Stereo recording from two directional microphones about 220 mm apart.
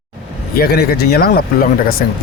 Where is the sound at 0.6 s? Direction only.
45° left (ahead or behind).